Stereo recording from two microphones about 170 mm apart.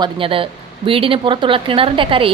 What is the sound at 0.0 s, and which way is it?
A woman's voice, 30° right (ahead or behind).